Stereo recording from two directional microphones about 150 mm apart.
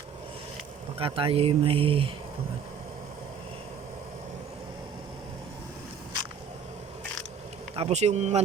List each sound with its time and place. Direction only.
0.9 s speech: 40° right (ahead or behind)
7.8 s speech: 45° right (ahead or behind)